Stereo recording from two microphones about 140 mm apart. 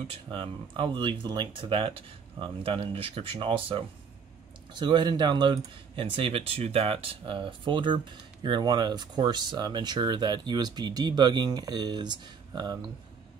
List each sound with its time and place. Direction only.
0.1 s speech: 40° right (ahead or behind)